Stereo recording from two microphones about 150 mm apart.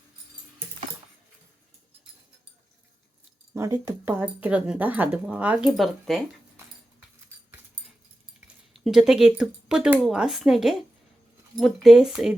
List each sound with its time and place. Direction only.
3.5 s speech: 20° right (ahead or behind)
4.0 s speech: 10° right (ahead or behind)
8.4 s speech: centre (ahead or behind)